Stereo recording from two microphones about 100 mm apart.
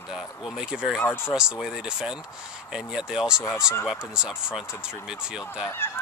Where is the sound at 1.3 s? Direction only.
5° right (ahead or behind).